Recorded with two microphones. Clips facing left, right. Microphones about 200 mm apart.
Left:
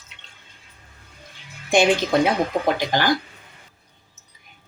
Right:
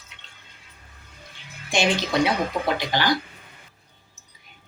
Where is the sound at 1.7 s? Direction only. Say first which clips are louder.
Left 5 dB; 50° left (ahead or behind).